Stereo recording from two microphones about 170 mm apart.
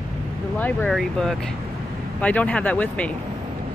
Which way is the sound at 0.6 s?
10° left (ahead or behind).